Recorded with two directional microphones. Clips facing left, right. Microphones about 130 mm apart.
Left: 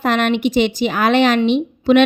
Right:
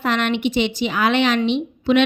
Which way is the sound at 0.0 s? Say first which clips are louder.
Left 4 dB; 45° left (ahead or behind).